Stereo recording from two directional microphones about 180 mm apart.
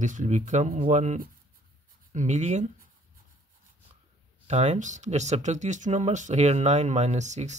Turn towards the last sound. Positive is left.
turn(degrees=-40)  # may be behind; listen again after turning